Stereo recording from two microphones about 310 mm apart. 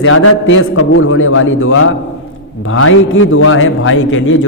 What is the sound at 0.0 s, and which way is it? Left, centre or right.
A man's voice, left.